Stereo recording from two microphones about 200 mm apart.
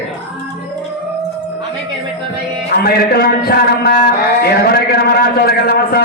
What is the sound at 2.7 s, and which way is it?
A man's voice, 50° left (ahead or behind).